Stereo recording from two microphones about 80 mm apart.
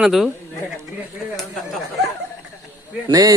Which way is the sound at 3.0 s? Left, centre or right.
Right.